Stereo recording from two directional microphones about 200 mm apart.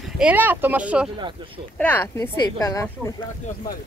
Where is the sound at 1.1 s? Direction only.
25° right (ahead or behind).